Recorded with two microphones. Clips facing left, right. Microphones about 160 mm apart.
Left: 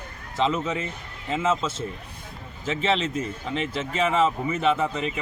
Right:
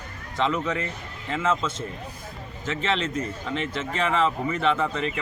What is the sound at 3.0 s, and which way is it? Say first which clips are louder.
A man's voice: even; 5° left (ahead or behind).